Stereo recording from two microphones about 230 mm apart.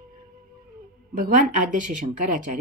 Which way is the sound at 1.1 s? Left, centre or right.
Right.